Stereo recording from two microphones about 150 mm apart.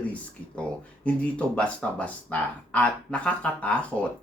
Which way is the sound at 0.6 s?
10° left (ahead or behind).